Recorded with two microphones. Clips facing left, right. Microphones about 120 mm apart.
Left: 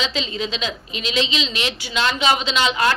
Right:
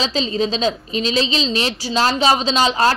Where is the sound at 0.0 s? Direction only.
35° right (ahead or behind).